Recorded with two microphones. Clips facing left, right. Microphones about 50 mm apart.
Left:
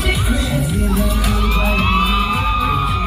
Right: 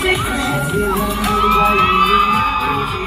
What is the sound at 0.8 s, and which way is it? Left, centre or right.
Crowd, right.